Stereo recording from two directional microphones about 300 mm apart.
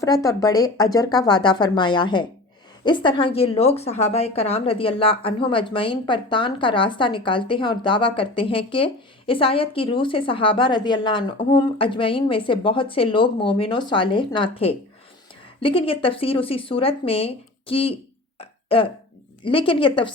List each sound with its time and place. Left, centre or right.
0.0 s a woman's voice: centre
18.3 s burping: centre
19.5 s a woman's voice: centre